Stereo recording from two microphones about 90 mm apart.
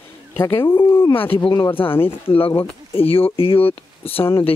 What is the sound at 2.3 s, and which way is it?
Speech, 90° left.